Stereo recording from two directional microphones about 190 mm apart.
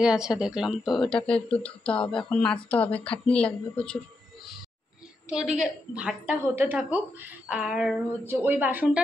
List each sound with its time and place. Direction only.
0.0 s speech: 5° right (ahead or behind)
5.3 s a woman's voice: 5° right (ahead or behind)